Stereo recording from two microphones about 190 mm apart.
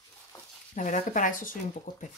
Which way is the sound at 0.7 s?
40° left (ahead or behind).